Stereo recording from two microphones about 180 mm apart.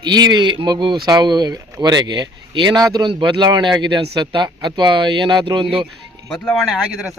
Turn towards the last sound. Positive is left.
turn(degrees=0)  # may be behind; listen again after turning